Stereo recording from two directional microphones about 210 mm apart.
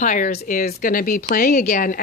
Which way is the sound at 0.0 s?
40° left (ahead or behind).